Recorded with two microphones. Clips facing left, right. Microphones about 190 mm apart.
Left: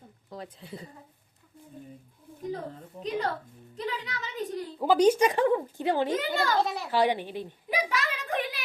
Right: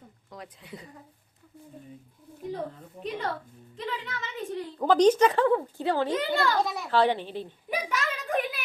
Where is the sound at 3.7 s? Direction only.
40° left (ahead or behind).